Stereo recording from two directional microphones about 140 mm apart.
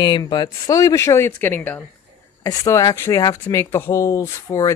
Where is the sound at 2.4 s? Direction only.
25° left (ahead or behind).